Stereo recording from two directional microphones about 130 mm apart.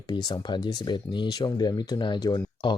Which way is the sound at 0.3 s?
35° left (ahead or behind).